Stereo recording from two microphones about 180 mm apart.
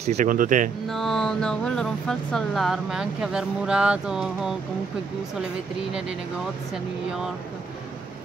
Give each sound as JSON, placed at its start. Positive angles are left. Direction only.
{"t": 0.0, "sound": "speech", "side_deg": -40}
{"t": 0.8, "sound": "speech", "side_deg": 0}